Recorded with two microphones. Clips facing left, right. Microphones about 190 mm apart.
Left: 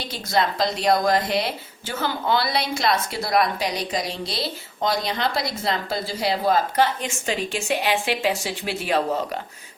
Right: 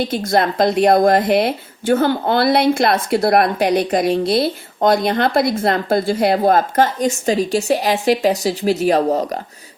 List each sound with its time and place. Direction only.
0.0 s a woman's voice: 50° right (ahead or behind)